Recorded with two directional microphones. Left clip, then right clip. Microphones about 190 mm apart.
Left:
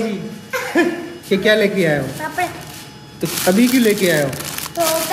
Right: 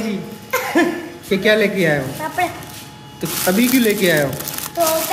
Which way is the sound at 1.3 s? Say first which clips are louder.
Left 1 dB; 5° left (ahead or behind).